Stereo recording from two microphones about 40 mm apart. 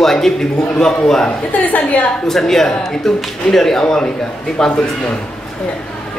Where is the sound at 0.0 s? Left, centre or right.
Centre.